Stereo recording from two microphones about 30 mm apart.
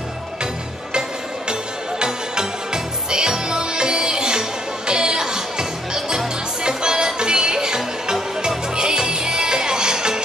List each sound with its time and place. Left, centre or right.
1.5 s music: right